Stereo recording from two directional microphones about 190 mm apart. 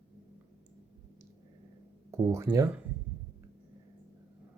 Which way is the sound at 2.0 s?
15° right (ahead or behind).